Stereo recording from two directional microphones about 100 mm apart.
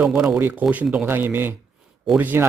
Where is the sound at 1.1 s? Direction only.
20° right (ahead or behind).